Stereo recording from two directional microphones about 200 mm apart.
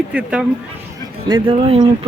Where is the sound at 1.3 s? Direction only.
25° right (ahead or behind).